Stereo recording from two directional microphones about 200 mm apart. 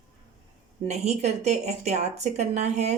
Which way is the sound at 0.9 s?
35° right (ahead or behind).